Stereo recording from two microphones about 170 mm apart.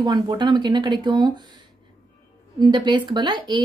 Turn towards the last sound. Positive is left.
turn(degrees=-25)  # may be behind; listen again after turning